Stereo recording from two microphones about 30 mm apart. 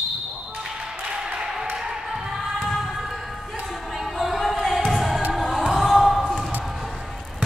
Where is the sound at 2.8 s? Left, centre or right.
Centre.